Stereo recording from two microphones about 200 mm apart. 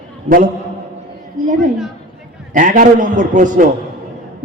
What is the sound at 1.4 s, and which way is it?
A woman's voice, 40° right (ahead or behind).